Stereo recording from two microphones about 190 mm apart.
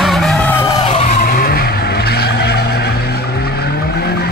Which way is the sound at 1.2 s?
55° left (ahead or behind).